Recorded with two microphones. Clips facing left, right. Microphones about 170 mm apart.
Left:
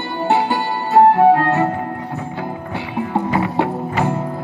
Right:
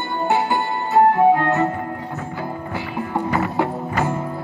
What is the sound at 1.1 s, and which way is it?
Music, 30° left (ahead or behind).